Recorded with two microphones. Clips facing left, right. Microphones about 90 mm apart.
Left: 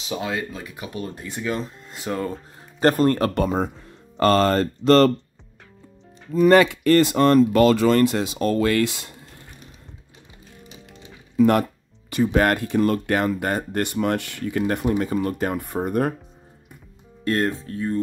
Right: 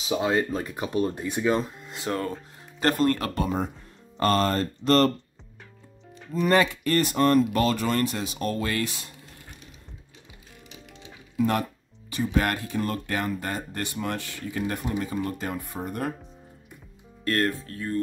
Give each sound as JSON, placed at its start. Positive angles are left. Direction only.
{"t": 0.2, "sound": "speech", "side_deg": -30}
{"t": 1.9, "sound": "speech", "side_deg": 5}
{"t": 2.8, "sound": "speech", "side_deg": 35}
{"t": 3.3, "sound": "speech", "side_deg": 90}
{"t": 6.5, "sound": "speech", "side_deg": 80}
{"t": 11.3, "sound": "speech", "side_deg": 65}
{"t": 17.2, "sound": "speech", "side_deg": 20}